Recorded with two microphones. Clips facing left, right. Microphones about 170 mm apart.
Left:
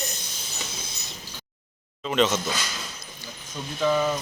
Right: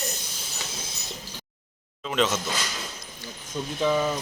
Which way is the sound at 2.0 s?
Centre (ahead or behind).